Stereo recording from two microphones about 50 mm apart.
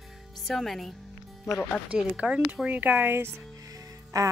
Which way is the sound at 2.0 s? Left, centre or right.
Right.